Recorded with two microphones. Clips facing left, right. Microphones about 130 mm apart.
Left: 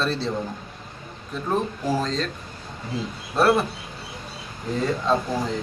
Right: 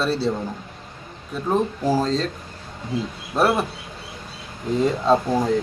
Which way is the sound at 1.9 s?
30° right (ahead or behind).